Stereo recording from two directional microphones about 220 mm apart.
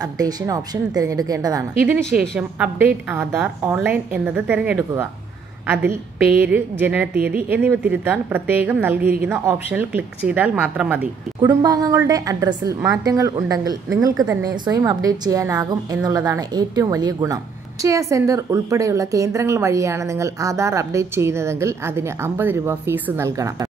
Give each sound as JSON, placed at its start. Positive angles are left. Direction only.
{"t": 0.0, "sound": "a woman's voice", "side_deg": -15}
{"t": 1.9, "sound": "a woman's voice", "side_deg": 0}
{"t": 11.4, "sound": "a woman's voice", "side_deg": -15}